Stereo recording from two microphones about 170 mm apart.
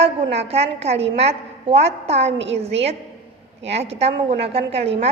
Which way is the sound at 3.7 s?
35° right (ahead or behind).